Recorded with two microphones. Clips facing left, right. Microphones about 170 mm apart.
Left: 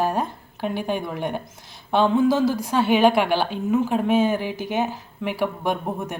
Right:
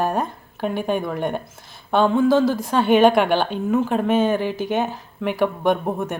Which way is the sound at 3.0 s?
5° left (ahead or behind).